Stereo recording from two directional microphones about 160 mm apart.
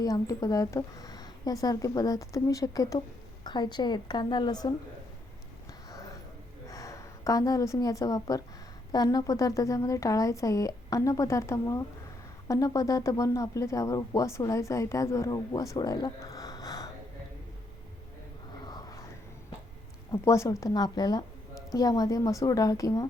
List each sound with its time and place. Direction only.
0.0 s speech: 20° left (ahead or behind)
6.7 s speech: 20° left (ahead or behind)
18.5 s a sound: 25° left (ahead or behind)
20.1 s speech: 20° left (ahead or behind)